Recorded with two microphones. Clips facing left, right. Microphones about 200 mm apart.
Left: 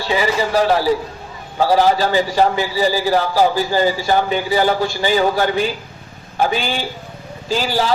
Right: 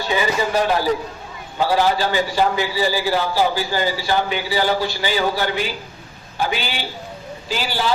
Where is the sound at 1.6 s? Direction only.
40° left (ahead or behind).